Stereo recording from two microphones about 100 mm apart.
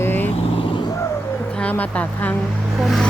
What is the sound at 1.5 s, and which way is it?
Speech, 15° left (ahead or behind).